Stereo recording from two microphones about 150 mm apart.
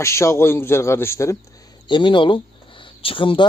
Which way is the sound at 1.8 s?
30° left (ahead or behind).